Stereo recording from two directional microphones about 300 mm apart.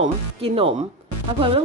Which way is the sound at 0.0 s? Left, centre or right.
Centre.